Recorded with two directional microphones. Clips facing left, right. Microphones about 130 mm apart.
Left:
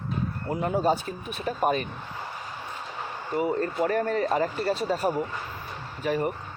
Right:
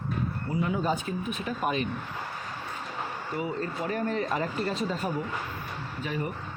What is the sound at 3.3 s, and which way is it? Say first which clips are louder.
Speech: left 7 dB; 45° left (ahead or behind).